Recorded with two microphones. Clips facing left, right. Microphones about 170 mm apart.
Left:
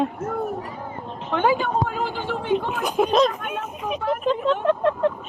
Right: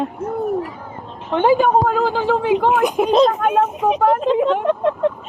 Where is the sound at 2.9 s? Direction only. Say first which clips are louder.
Right 3 dB; 15° right (ahead or behind).